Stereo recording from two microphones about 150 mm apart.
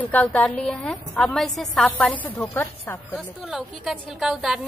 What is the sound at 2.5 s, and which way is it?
Speech, 15° left (ahead or behind).